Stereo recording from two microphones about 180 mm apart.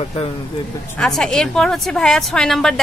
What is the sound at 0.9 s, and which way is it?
A woman's voice, centre (ahead or behind).